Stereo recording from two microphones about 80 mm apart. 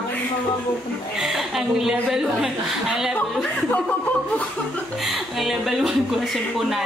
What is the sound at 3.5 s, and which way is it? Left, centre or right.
Speech, centre.